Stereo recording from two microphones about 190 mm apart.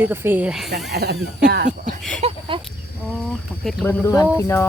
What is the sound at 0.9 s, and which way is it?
Speech, 60° right (ahead or behind).